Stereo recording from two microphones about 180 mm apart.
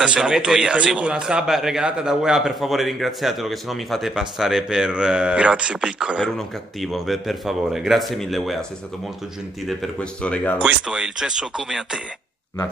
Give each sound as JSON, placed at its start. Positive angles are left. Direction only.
{"t": 0.0, "sound": "a man's voice", "side_deg": -5}
{"t": 9.7, "sound": "speech", "side_deg": 5}
{"t": 10.9, "sound": "a man's voice", "side_deg": -5}